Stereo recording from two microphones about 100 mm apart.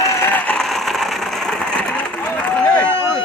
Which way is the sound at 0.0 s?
30° left (ahead or behind).